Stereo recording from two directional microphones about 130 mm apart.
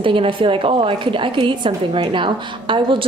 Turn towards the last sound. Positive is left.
turn(degrees=-40)  # may be behind; listen again after turning